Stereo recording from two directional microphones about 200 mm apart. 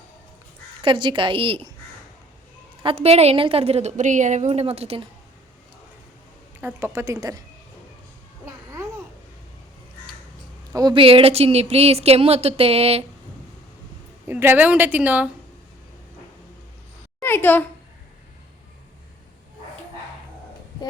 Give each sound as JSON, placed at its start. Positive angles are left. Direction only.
{"t": 0.8, "sound": "speech", "side_deg": -25}
{"t": 2.8, "sound": "a woman's voice", "side_deg": -30}
{"t": 6.6, "sound": "a woman's voice", "side_deg": -10}
{"t": 8.4, "sound": "babbling", "side_deg": -15}
{"t": 10.7, "sound": "speech", "side_deg": -20}
{"t": 14.3, "sound": "a woman's voice", "side_deg": -10}
{"t": 17.2, "sound": "a child's voice", "side_deg": 10}